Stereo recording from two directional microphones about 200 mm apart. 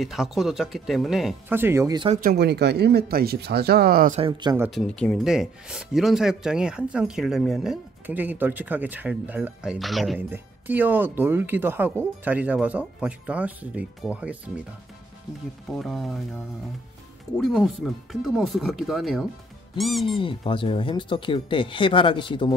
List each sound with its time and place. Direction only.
0.0 s speech: centre (ahead or behind)
1.5 s speech: 10° right (ahead or behind)
2.1 s speech: 50° right (ahead or behind)
4.2 s speech: 20° right (ahead or behind)
4.6 s speech: 5° left (ahead or behind)
15.7 s speech: centre (ahead or behind)
17.4 s speech: centre (ahead or behind)
20.2 s speech: 25° left (ahead or behind)